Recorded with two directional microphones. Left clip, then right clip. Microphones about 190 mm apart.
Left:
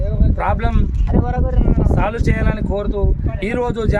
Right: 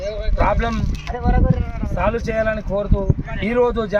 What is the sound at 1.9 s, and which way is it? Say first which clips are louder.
Speech: right 5 dB; 20° left (ahead or behind).